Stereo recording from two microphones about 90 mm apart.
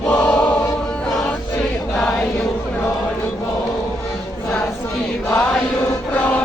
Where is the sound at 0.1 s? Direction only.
10° left (ahead or behind).